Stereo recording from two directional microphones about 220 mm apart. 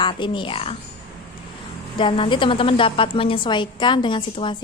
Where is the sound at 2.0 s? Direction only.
25° left (ahead or behind).